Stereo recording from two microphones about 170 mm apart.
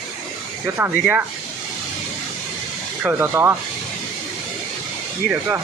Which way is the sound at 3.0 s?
15° right (ahead or behind).